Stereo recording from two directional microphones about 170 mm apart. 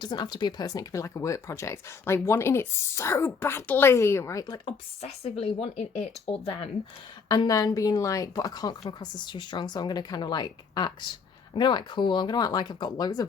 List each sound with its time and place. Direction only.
0.0 s speech: 25° left (ahead or behind)
5.0 s a woman's voice: 35° left (ahead or behind)